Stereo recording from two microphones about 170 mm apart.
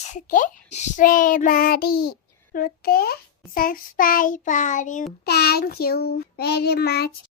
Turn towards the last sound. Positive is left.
turn(degrees=70)  # may be behind; listen again after turning